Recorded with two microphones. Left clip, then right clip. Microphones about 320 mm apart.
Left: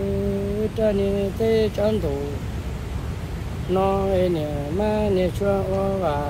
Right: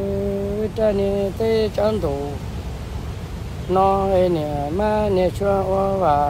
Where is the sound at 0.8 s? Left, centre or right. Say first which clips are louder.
Right 3 dB; centre.